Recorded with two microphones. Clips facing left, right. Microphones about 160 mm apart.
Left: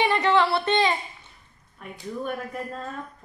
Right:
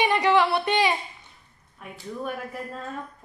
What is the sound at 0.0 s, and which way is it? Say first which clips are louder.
A woman's voice: even; 15° right (ahead or behind).